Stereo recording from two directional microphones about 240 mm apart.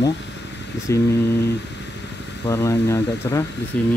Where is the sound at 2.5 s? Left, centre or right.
Centre.